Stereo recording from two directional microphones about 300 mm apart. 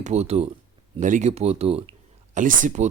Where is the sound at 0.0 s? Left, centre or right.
Right.